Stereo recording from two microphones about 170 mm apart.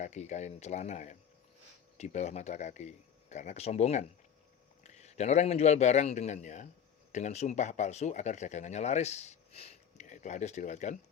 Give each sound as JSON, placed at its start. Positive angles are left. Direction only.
{"t": 0.0, "sound": "a man's voice", "side_deg": 45}